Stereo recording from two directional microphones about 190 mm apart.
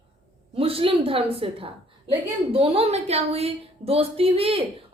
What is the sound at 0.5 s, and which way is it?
A woman's voice, 30° right (ahead or behind).